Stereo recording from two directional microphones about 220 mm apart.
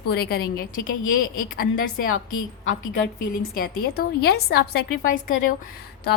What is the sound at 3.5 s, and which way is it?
A woman's voice, 45° left (ahead or behind).